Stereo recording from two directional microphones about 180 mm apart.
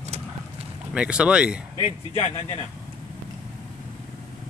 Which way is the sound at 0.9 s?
5° right (ahead or behind).